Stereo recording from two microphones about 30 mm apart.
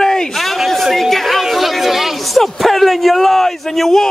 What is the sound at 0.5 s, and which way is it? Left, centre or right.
Speech, centre.